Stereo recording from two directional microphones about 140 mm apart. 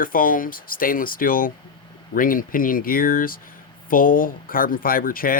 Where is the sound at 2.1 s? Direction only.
80° left.